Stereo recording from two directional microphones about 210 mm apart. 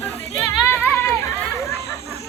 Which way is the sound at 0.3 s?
10° left (ahead or behind).